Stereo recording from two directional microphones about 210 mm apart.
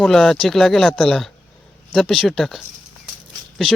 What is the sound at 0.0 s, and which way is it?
Speech, centre (ahead or behind).